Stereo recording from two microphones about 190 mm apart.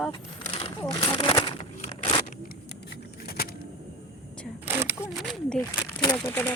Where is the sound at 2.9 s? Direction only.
55° left (ahead or behind).